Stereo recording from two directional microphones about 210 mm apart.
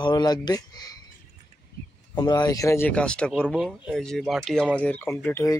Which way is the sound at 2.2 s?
20° left (ahead or behind).